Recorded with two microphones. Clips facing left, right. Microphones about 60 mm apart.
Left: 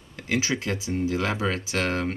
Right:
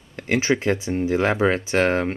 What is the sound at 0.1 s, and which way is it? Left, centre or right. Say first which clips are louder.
Speech: right 5 dB; right.